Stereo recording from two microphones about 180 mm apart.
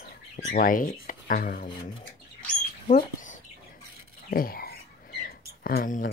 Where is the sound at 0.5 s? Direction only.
50° left (ahead or behind).